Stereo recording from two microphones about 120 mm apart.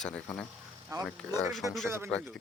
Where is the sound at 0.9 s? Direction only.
25° right (ahead or behind).